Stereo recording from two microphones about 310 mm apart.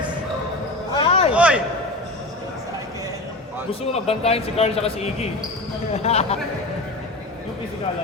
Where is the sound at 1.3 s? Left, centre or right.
Centre.